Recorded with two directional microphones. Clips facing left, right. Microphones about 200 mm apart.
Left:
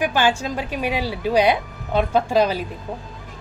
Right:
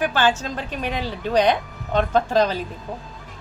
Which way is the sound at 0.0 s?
10° left (ahead or behind).